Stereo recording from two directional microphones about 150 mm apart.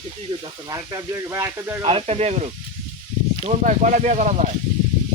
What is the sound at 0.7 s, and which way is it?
Speech, 20° right (ahead or behind).